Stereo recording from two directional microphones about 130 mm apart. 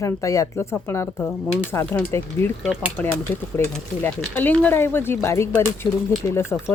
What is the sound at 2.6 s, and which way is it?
Speech, 5° right (ahead or behind).